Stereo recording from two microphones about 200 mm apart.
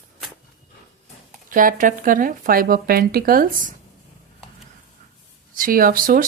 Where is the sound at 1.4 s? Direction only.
40° right (ahead or behind).